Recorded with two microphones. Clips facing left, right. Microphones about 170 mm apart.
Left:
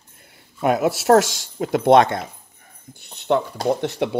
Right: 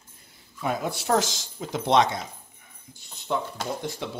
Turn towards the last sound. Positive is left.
turn(degrees=70)  # may be behind; listen again after turning